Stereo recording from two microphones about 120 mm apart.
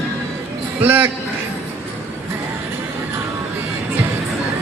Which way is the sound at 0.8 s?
15° right (ahead or behind).